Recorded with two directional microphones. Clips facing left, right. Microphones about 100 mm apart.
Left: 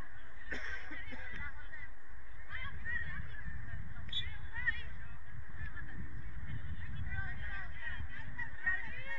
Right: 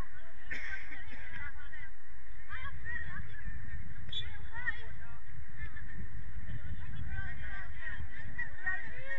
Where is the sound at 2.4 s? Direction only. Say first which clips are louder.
Even; 20° right (ahead or behind).